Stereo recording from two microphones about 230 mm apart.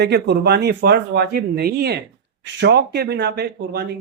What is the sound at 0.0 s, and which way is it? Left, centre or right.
Speech, right.